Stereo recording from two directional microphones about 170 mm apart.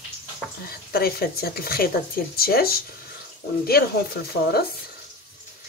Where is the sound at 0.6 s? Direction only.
65° left (ahead or behind).